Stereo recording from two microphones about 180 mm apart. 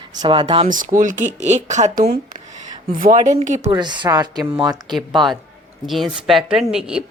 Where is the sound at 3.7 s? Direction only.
25° right (ahead or behind).